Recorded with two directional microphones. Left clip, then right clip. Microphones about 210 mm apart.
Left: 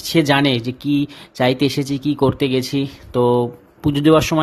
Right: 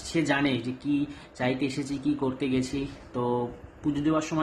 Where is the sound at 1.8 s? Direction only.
45° left (ahead or behind).